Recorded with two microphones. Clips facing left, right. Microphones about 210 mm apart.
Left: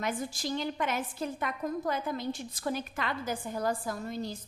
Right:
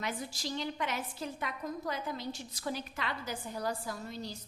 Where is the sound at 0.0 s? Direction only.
50° left (ahead or behind).